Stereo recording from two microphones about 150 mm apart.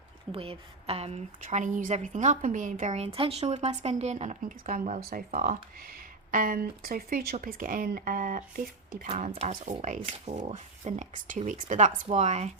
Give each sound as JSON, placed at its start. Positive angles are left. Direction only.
{"t": 0.3, "sound": "speech", "side_deg": -40}
{"t": 1.4, "sound": "a woman's voice", "side_deg": -55}
{"t": 7.4, "sound": "a woman's voice", "side_deg": -65}
{"t": 9.0, "sound": "a woman's voice", "side_deg": -55}
{"t": 9.3, "sound": "a woman's voice", "side_deg": -45}
{"t": 12.0, "sound": "speech", "side_deg": -50}